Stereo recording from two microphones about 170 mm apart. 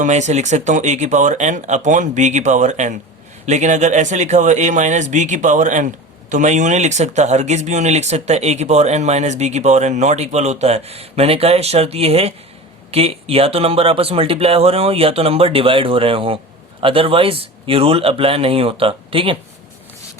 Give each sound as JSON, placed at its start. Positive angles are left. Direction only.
{"t": 0.0, "sound": "speech", "side_deg": -45}